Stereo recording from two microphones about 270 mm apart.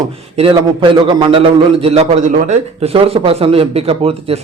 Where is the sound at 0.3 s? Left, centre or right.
Centre.